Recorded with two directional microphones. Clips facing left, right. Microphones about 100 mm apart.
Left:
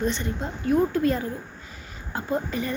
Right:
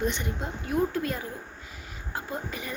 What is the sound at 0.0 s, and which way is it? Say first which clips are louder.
A woman's voice: left 3 dB; 15° right (ahead or behind).